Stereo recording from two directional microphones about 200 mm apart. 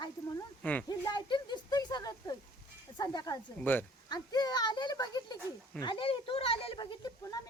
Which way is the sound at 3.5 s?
10° left (ahead or behind).